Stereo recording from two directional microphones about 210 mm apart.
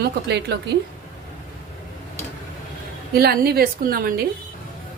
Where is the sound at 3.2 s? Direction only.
45° right (ahead or behind).